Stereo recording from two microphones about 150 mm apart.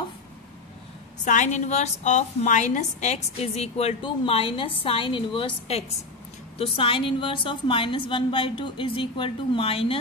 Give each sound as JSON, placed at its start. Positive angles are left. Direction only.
{"t": 1.2, "sound": "a woman's voice", "side_deg": 55}